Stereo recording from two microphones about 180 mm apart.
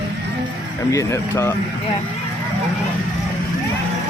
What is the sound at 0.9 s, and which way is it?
Speech, 15° left (ahead or behind).